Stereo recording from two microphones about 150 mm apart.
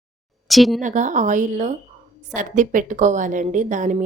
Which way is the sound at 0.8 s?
55° right (ahead or behind).